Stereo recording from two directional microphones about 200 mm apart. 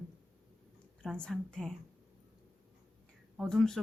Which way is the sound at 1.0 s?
5° left (ahead or behind).